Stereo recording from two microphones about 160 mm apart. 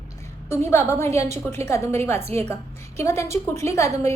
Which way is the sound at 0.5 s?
15° left (ahead or behind).